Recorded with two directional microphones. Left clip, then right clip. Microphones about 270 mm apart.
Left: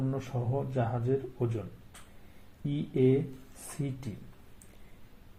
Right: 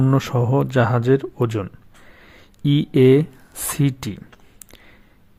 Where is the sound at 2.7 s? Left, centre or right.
Right.